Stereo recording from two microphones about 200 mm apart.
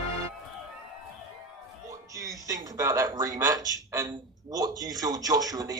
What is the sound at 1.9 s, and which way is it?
Speech, 15° right (ahead or behind).